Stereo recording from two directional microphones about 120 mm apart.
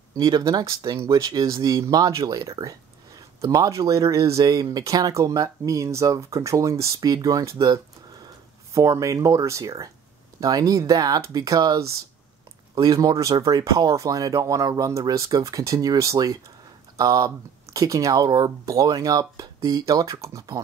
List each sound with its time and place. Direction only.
0.1 s speech: 30° right (ahead or behind)